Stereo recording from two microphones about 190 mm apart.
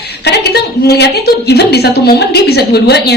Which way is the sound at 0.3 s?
60° left (ahead or behind).